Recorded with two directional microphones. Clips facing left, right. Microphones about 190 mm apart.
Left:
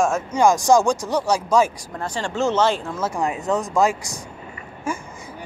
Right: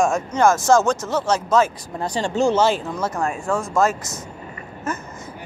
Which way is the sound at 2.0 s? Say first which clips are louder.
Right 3 dB; 15° right (ahead or behind).